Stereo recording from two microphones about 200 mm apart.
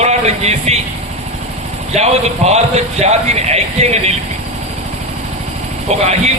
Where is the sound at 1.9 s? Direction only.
30° right (ahead or behind).